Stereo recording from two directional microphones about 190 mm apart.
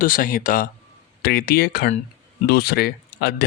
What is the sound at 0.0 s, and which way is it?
Speech, 45° left (ahead or behind).